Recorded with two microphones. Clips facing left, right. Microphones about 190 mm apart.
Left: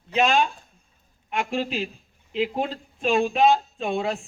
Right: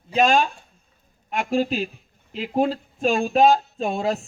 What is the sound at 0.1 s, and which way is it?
A man's voice, 40° right (ahead or behind).